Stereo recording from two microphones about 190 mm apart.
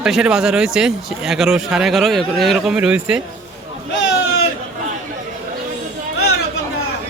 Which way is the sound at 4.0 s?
90° left.